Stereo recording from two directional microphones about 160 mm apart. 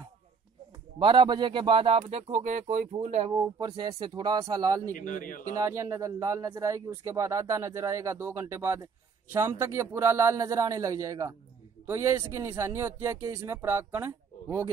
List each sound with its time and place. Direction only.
0.9 s speech: 30° right (ahead or behind)
3.3 s a man's voice: 25° right (ahead or behind)
4.9 s a man's voice: 55° left (ahead or behind)
5.6 s a man's voice: 15° right (ahead or behind)
12.4 s speech: 15° right (ahead or behind)